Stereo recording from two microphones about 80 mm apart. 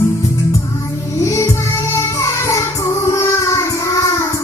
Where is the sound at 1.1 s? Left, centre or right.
Left.